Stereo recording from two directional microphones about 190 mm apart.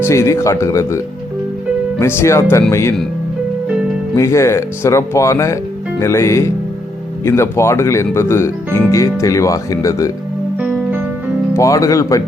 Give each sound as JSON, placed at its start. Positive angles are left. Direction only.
{"t": 0.0, "sound": "speech", "side_deg": 15}
{"t": 4.1, "sound": "speech", "side_deg": 15}
{"t": 10.6, "sound": "music", "side_deg": -10}
{"t": 11.5, "sound": "speech", "side_deg": 15}